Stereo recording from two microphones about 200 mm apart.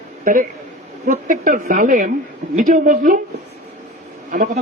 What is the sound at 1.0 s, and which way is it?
A woman's voice, 40° right (ahead or behind).